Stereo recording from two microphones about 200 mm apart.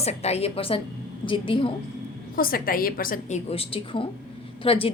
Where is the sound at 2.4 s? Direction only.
45° left (ahead or behind).